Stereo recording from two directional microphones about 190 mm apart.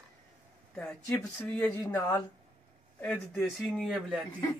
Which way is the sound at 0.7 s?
10° left (ahead or behind).